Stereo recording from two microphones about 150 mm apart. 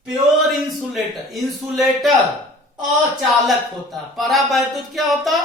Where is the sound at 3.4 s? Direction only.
Centre (ahead or behind).